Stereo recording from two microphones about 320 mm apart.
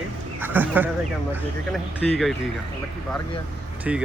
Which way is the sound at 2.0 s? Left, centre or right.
Centre.